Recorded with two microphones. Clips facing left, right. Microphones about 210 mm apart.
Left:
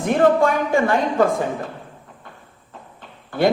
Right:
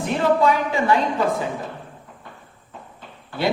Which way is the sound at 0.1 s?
50° left (ahead or behind).